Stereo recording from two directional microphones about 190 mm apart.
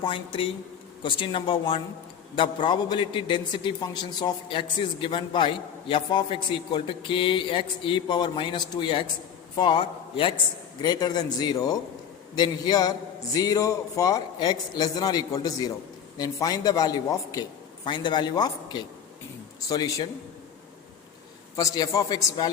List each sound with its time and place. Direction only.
0.0 s a man's voice: 30° left (ahead or behind)
21.5 s a man's voice: 15° left (ahead or behind)